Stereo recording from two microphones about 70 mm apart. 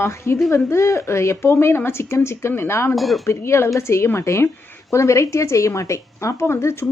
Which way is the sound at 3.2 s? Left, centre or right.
Left.